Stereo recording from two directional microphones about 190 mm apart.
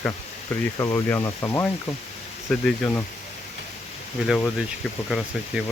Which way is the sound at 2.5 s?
5° left (ahead or behind).